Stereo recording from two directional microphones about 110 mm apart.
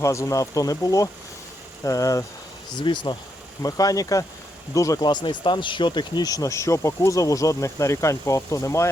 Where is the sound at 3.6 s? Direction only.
30° left (ahead or behind).